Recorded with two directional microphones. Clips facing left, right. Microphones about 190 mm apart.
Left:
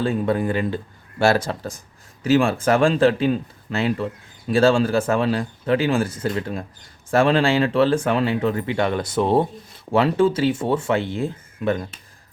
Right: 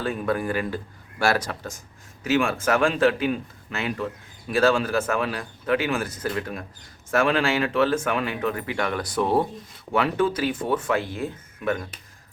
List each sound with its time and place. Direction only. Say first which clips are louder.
0.0 s a man's voice: left 5 dB; 25° left (ahead or behind)